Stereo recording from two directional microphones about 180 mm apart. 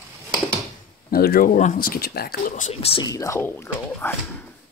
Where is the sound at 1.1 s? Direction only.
60° left (ahead or behind).